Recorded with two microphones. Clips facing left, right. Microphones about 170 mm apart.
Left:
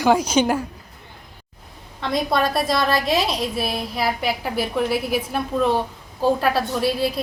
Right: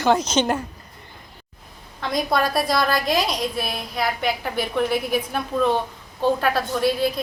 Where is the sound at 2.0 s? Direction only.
Centre (ahead or behind).